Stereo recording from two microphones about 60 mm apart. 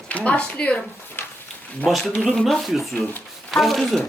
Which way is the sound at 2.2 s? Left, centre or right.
Centre.